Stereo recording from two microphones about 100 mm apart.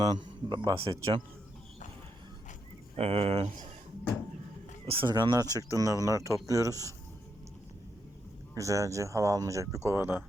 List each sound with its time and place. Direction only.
0.0 s a man's voice: 45° right (ahead or behind)
2.9 s speech: 85° right
5.0 s speech: 45° right (ahead or behind)
8.5 s speech: 30° right (ahead or behind)